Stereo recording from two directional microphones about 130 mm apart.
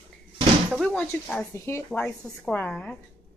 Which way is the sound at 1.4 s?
20° left (ahead or behind).